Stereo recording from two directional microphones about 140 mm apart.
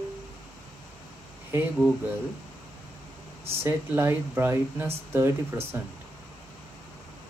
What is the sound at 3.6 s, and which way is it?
Speech, 15° right (ahead or behind).